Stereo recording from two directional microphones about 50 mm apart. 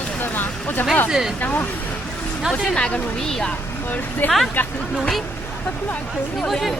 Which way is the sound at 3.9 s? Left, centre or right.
Left.